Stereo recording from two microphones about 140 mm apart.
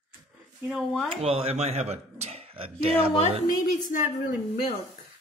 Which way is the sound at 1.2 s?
45° right (ahead or behind).